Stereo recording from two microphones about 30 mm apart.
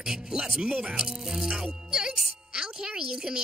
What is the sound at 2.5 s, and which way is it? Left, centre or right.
Speech, right.